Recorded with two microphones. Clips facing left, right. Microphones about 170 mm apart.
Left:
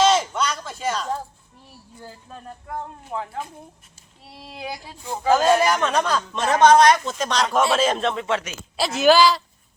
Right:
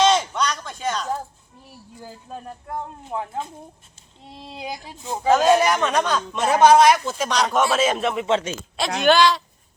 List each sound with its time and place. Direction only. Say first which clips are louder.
0.0 s a sound: even; 5° left (ahead or behind)
2.0 s speech: right 4 dB; 10° right (ahead or behind)
5.3 s a man's voice: right 1 dB; centre (ahead or behind)
8.1 s speech: right 3 dB; 20° right (ahead or behind)
8.7 s a man's voice: left 2 dB; 5° left (ahead or behind)